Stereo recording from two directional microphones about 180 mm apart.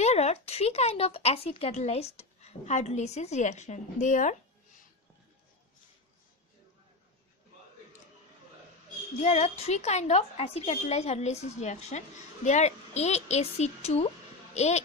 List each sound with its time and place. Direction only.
0.0 s speech: 35° left (ahead or behind)
9.2 s a woman's voice: 35° left (ahead or behind)